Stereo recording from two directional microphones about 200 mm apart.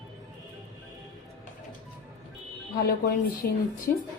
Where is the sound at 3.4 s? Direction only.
50° left (ahead or behind).